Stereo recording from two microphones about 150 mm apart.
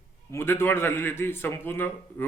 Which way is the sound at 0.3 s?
15° left (ahead or behind).